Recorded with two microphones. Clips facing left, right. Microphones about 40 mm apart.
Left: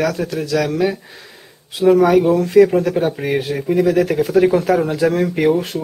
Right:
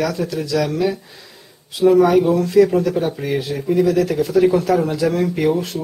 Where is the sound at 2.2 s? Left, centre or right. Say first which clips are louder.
Left 2 dB; left.